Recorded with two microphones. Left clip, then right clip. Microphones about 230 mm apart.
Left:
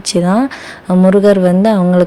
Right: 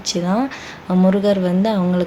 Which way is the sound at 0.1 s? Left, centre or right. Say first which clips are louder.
Left 7 dB; left.